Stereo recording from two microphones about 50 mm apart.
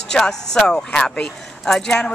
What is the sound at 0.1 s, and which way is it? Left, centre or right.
Speech, centre.